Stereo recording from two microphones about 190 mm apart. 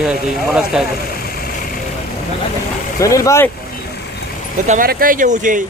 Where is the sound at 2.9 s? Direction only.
15° left (ahead or behind).